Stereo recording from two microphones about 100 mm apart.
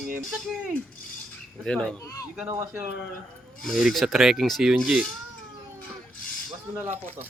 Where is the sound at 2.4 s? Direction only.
25° right (ahead or behind).